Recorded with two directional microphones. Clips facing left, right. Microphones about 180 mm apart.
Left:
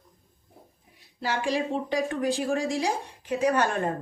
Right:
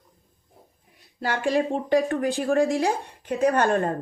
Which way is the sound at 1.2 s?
50° right (ahead or behind).